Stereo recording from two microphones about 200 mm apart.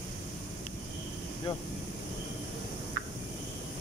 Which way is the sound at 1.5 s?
25° left (ahead or behind).